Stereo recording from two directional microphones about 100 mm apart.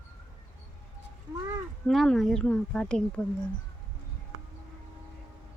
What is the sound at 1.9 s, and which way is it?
Speech, 5° left (ahead or behind).